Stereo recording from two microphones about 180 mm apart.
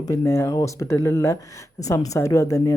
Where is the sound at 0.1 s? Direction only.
15° left (ahead or behind).